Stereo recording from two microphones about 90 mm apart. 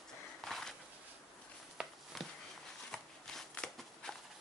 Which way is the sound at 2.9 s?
5° left (ahead or behind).